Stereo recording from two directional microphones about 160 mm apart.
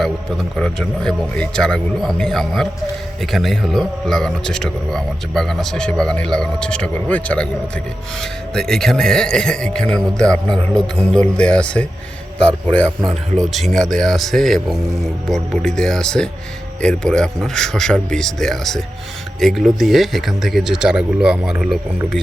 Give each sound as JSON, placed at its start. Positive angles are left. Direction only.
{"t": 0.0, "sound": "a man's voice", "side_deg": 5}
{"t": 13.4, "sound": "a man's voice", "side_deg": 0}